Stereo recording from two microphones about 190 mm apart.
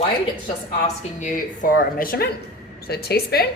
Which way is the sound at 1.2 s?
45° left (ahead or behind).